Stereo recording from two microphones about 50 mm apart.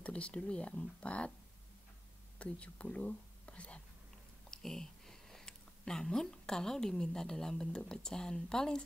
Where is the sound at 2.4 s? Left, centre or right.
Left.